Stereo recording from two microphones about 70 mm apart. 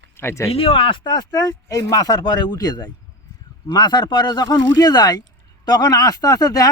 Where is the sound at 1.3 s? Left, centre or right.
Left.